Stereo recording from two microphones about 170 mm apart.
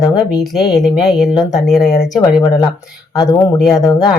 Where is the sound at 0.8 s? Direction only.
Centre (ahead or behind).